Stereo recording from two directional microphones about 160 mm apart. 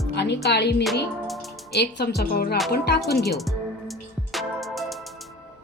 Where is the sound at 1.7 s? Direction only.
85° left.